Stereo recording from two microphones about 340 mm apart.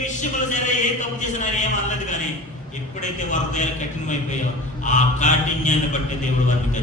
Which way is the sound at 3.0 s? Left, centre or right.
Left.